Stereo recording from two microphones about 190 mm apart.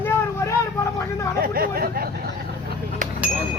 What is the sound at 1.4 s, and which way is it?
Speech, 50° right (ahead or behind).